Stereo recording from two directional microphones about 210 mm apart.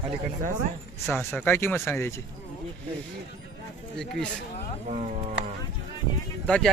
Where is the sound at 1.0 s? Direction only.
10° left (ahead or behind).